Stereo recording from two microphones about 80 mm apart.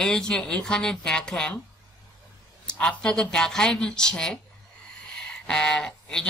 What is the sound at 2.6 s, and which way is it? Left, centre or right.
Speech, centre.